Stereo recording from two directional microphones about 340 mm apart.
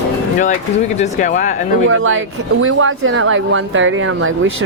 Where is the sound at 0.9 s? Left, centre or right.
Left.